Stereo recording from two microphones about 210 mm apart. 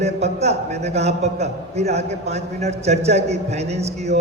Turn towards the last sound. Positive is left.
turn(degrees=-30)  # may be behind; listen again after turning